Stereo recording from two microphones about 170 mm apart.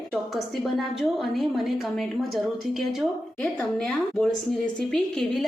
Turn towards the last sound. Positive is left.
turn(degrees=0)  # may be behind; listen again after turning